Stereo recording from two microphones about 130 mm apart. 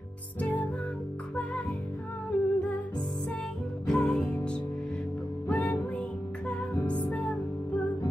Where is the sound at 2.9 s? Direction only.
35° left (ahead or behind).